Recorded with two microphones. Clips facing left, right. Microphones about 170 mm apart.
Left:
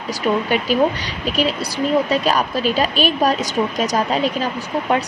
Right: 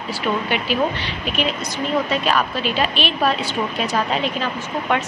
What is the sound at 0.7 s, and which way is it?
Speech, 40° left (ahead or behind).